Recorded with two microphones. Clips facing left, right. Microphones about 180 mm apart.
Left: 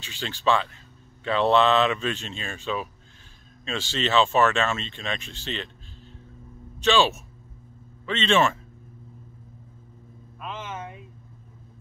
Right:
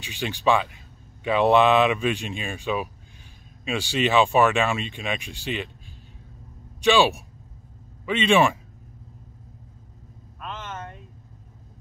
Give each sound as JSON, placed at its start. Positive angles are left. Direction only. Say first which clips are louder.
{"t": 0.0, "sound": "speech", "louder": "right 2 dB", "side_deg": -15}
{"t": 6.8, "sound": "speech", "louder": "right 2 dB", "side_deg": -10}
{"t": 10.4, "sound": "vehicle", "louder": "left 1 dB", "side_deg": 5}